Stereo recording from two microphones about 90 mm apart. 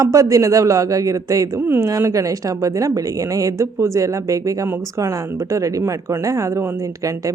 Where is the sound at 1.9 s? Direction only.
40° right (ahead or behind).